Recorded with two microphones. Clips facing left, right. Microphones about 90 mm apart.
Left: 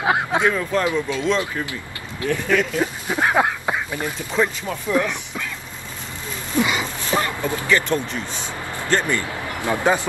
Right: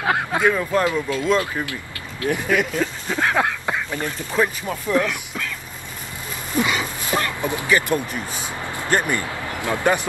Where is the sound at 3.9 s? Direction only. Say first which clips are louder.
Even; 5° left (ahead or behind).